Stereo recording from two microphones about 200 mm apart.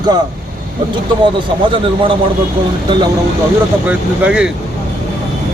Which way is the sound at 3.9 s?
5° right (ahead or behind).